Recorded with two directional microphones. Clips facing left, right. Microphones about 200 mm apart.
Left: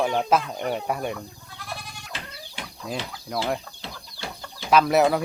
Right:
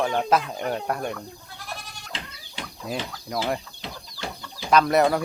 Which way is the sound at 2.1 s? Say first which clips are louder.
Right 1 dB; 15° right (ahead or behind).